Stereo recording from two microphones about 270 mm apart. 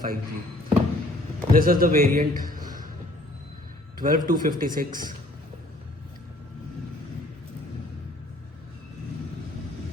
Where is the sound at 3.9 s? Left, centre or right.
Right.